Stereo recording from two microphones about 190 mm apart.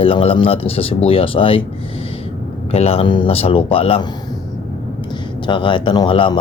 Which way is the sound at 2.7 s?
30° left (ahead or behind).